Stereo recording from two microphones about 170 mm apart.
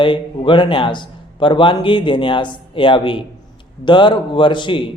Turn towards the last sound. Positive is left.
turn(degrees=30)  # may be behind; listen again after turning